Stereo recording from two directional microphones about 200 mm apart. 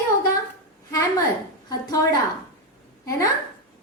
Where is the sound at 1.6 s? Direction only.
20° left (ahead or behind).